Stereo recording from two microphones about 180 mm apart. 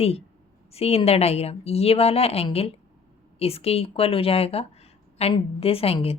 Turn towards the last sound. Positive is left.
turn(degrees=35)  # may be behind; listen again after turning